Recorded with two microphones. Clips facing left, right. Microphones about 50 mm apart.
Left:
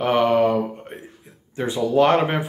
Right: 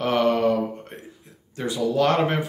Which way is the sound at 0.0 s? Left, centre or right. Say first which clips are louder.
Left 3 dB; centre.